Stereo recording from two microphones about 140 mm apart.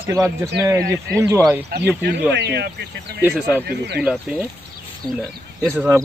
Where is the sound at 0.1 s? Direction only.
25° right (ahead or behind).